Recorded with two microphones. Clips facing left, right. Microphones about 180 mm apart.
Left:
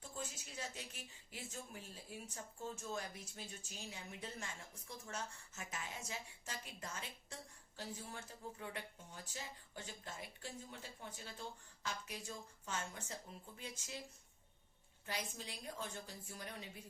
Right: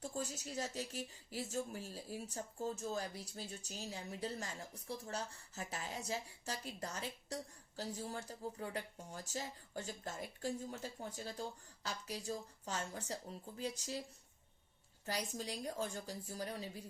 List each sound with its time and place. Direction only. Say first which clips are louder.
0.0 s a woman's voice: right 6 dB; 40° right (ahead or behind)
15.0 s a woman's voice: right 5 dB; 40° right (ahead or behind)